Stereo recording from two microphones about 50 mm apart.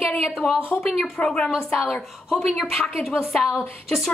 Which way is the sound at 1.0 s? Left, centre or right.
Left.